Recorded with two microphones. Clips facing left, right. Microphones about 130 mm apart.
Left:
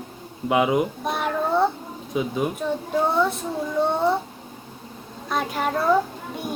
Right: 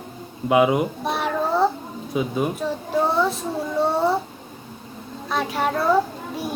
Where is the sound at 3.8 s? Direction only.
30° right (ahead or behind).